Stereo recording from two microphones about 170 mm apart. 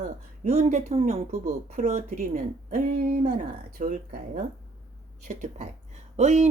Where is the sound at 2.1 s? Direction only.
50° right (ahead or behind).